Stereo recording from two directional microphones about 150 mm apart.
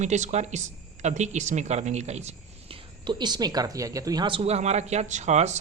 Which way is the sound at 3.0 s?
30° right (ahead or behind).